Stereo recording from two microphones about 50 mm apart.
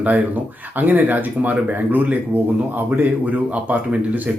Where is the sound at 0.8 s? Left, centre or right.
Right.